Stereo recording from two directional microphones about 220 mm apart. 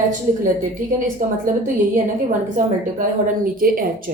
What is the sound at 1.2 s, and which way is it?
A woman's voice, 35° right (ahead or behind).